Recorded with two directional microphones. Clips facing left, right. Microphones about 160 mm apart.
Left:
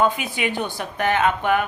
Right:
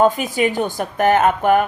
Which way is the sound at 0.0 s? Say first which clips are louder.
Right 6 dB; 40° right (ahead or behind).